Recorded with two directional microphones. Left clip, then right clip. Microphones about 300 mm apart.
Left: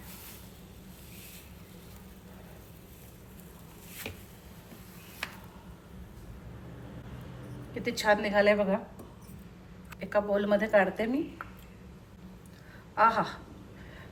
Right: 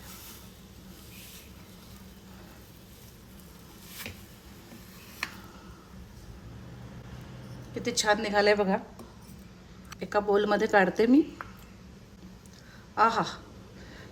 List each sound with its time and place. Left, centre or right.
7.7 s a woman's voice: centre
10.0 s a woman's voice: centre
13.0 s a woman's voice: centre